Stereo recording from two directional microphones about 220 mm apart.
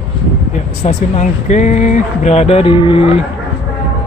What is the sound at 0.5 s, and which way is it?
Speech, 30° left (ahead or behind).